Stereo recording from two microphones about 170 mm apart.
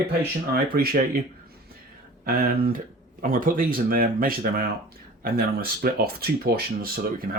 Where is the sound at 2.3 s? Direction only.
60° right (ahead or behind).